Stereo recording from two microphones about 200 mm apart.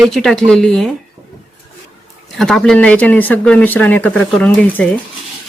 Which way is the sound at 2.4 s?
Centre (ahead or behind).